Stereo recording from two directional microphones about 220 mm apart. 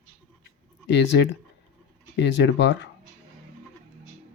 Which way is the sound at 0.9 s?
50° left (ahead or behind).